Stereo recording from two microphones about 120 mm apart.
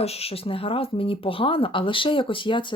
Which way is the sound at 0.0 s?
60° left (ahead or behind).